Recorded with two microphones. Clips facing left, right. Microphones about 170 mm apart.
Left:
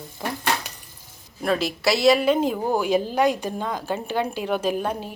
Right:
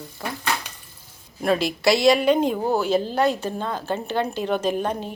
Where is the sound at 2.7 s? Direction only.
15° left (ahead or behind).